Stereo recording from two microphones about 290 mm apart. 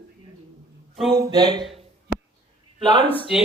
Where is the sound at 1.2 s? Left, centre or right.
Centre.